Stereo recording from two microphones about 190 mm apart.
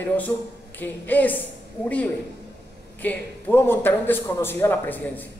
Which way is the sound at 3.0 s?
10° left (ahead or behind).